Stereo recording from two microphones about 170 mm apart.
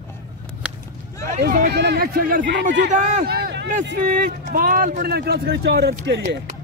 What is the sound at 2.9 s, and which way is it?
Speech, 45° right (ahead or behind).